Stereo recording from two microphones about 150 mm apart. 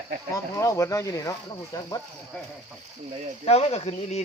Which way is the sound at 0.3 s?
20° left (ahead or behind).